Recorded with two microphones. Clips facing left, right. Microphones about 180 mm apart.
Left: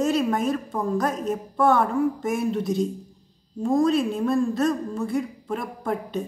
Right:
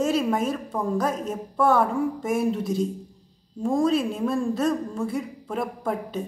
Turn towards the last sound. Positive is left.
turn(degrees=-5)  # may be behind; listen again after turning